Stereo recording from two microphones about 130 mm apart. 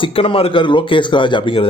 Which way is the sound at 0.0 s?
45° left (ahead or behind).